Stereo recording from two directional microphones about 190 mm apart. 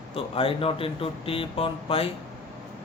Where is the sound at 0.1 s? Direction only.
30° left (ahead or behind).